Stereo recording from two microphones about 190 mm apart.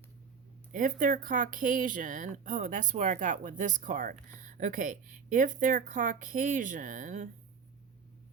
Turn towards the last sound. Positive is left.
turn(degrees=-40)  # may be behind; listen again after turning